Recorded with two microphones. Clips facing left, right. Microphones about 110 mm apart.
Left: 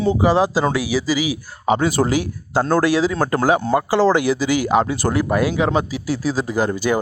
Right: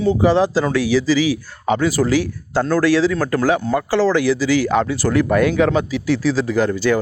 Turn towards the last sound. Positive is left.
turn(degrees=15)  # may be behind; listen again after turning